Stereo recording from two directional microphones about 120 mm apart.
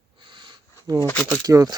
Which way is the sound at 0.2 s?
40° right (ahead or behind).